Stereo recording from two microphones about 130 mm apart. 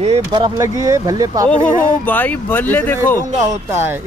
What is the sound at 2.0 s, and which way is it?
Speech, 15° left (ahead or behind).